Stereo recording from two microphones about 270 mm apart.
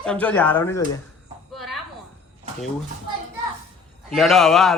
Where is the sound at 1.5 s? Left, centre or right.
Centre.